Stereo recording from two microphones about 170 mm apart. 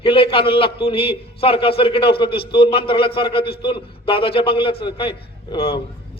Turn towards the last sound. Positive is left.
turn(degrees=35)  # may be behind; listen again after turning